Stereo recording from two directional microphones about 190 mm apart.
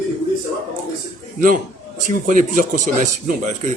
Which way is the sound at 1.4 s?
45° right (ahead or behind).